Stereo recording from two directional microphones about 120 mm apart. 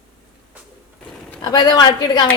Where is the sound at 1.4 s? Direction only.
35° left (ahead or behind).